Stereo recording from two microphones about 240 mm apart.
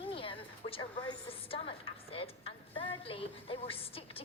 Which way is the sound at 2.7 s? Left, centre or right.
Left.